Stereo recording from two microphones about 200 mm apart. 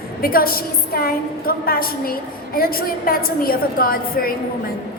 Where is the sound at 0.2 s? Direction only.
45° left (ahead or behind).